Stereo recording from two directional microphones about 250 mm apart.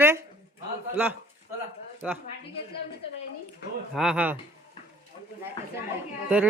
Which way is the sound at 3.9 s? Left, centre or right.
Centre.